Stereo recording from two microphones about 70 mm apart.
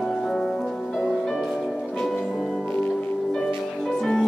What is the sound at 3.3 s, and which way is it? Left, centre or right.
Music, centre.